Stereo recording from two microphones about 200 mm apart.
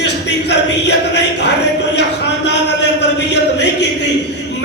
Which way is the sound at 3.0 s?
60° left (ahead or behind).